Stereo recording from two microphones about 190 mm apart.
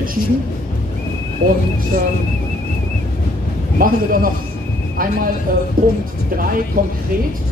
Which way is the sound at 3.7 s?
50° right (ahead or behind).